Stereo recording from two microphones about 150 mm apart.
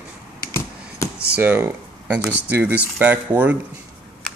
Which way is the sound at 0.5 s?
15° left (ahead or behind).